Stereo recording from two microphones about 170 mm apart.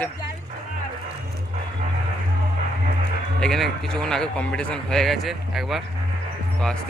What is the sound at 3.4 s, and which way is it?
Speech, centre (ahead or behind).